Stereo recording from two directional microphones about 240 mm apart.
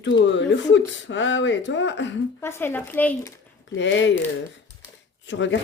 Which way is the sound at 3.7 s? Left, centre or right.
Left.